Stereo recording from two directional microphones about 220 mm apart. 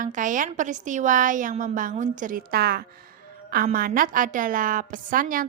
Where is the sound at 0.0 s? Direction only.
35° right (ahead or behind).